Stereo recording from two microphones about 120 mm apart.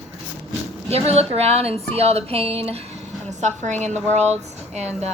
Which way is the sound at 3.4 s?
80° right.